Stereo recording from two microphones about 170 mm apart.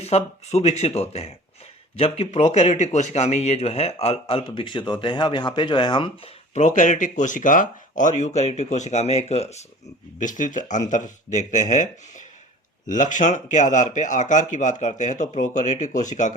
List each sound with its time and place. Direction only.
0.0 s speech: 40° left (ahead or behind)
6.5 s speech: 45° left (ahead or behind)